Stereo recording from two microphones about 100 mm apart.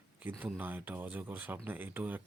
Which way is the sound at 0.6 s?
20° right (ahead or behind).